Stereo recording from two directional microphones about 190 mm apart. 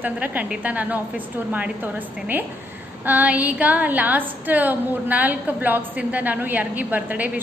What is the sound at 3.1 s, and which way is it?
A woman's voice, 10° right (ahead or behind).